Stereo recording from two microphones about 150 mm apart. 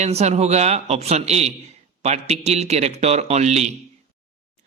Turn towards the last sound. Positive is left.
turn(degrees=-45)  # may be behind; listen again after turning